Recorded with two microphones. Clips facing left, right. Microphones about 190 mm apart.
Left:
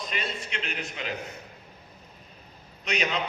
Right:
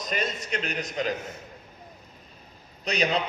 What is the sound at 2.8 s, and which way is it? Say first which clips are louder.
Speech: right 3 dB; 35° right (ahead or behind).